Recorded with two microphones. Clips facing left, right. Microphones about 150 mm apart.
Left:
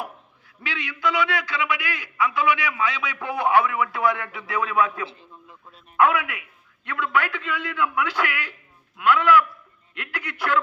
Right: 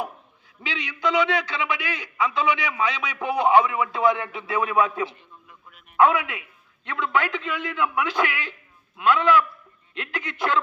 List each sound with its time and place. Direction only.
0.6 s a man's voice: 20° right (ahead or behind)
5.0 s a sound: 30° left (ahead or behind)
6.0 s a man's voice: 20° right (ahead or behind)